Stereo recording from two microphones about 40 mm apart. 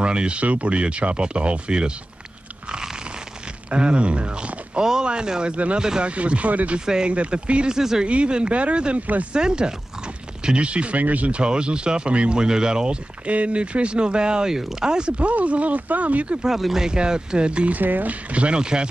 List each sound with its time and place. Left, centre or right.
0.0 s speech: right
3.7 s speech: right
6.0 s speech: right
7.7 s speech: centre
8.0 s speech: right
9.0 s speech: right
9.3 s speech: right
11.4 s speech: right
14.5 s speech: centre
14.9 s speech: right
16.4 s speech: centre; by 17.7 s right
17.7 s speech: right
18.3 s speech: right
18.6 s speech: right